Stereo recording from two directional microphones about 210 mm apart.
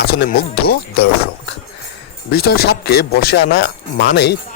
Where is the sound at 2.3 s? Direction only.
45° left (ahead or behind).